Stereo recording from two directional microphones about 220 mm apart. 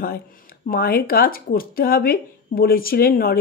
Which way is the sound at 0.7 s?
45° left (ahead or behind).